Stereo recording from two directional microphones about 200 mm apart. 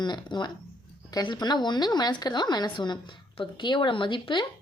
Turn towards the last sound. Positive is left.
turn(degrees=25)  # may be behind; listen again after turning